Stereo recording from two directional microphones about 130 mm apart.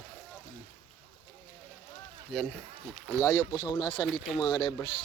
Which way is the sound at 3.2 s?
30° left (ahead or behind).